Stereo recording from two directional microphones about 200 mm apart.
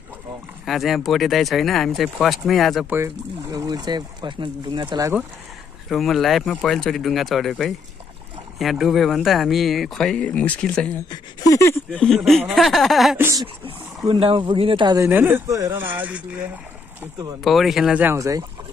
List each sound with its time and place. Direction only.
0.7 s speech: centre (ahead or behind)
2.9 s speech: 15° right (ahead or behind)
5.9 s speech: centre (ahead or behind)
13.2 s speech: 15° right (ahead or behind)
14.0 s speech: 30° right (ahead or behind)